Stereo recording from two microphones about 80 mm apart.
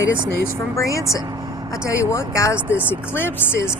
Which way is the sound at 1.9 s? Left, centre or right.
Left.